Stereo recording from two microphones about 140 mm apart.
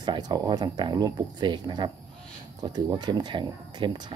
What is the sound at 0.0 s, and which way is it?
Speech, 30° right (ahead or behind).